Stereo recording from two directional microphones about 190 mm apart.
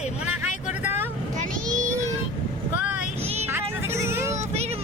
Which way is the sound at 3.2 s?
35° right (ahead or behind).